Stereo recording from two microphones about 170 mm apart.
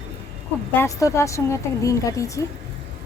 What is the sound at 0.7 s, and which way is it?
A woman's voice, 15° left (ahead or behind).